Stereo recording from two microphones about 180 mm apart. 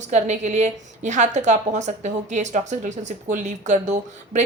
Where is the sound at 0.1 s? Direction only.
40° right (ahead or behind).